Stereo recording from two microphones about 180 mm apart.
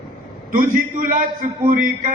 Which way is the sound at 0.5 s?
50° right (ahead or behind).